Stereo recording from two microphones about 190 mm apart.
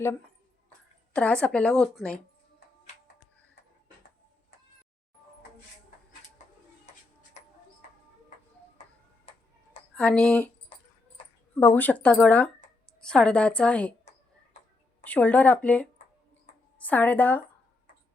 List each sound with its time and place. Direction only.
1.1 s a woman's voice: 5° left (ahead or behind)
9.9 s speech: 5° left (ahead or behind)
11.5 s a woman's voice: 10° left (ahead or behind)
15.0 s speech: 10° left (ahead or behind)
16.5 s a sound: 40° left (ahead or behind)
16.8 s speech: 10° left (ahead or behind)